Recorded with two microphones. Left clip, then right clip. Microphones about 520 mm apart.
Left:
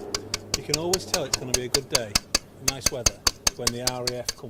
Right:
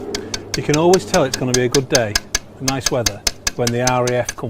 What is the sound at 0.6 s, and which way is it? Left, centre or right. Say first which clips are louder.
Speech: right 15 dB; right.